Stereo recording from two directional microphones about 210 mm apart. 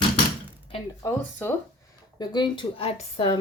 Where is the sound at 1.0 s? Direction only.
10° left (ahead or behind).